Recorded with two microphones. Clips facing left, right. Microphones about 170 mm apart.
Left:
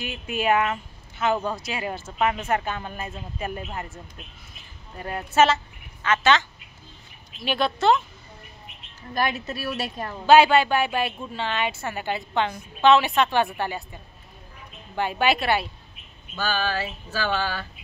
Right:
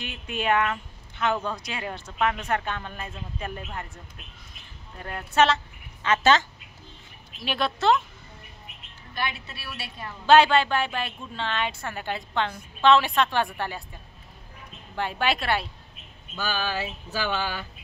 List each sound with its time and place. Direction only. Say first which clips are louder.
0.0 s speech: left 3 dB; 5° left (ahead or behind)
4.9 s speech: left 2 dB; 10° left (ahead or behind)
6.0 s speech: even; 40° right (ahead or behind)
7.3 s a woman's voice: left 3 dB; centre (ahead or behind)
9.1 s a woman's voice: left 6 dB; 40° left (ahead or behind)
10.2 s a woman's voice: left 2 dB; 5° left (ahead or behind)
15.0 s a woman's voice: left 4 dB; 5° left (ahead or behind)
16.3 s a sound: left 3 dB; 15° right (ahead or behind)